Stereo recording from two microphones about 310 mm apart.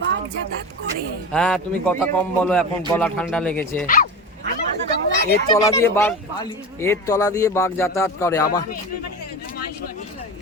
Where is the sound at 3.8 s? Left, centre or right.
Left.